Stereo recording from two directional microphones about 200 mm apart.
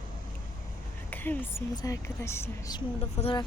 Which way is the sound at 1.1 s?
10° left (ahead or behind).